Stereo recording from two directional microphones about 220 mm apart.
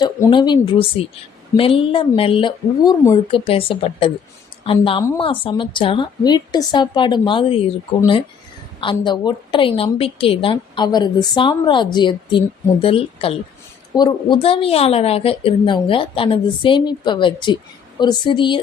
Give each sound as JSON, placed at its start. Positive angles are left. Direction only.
{"t": 0.0, "sound": "a woman's voice", "side_deg": 20}
{"t": 8.8, "sound": "a woman's voice", "side_deg": 20}